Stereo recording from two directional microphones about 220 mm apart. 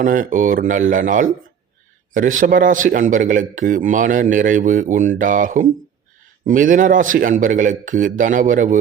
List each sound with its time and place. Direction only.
0.0 s a man's voice: 35° right (ahead or behind)